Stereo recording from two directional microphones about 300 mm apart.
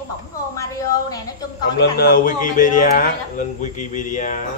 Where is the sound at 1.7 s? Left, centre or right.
Left.